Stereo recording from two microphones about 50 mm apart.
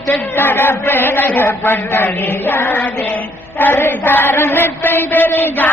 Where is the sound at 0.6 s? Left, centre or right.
Left.